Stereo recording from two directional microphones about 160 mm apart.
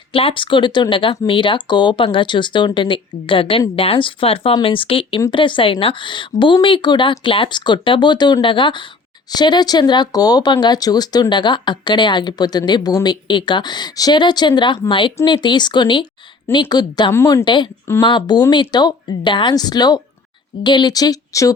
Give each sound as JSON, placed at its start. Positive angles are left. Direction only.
{"t": 0.1, "sound": "speech", "side_deg": 35}
{"t": 17.4, "sound": "speech", "side_deg": 30}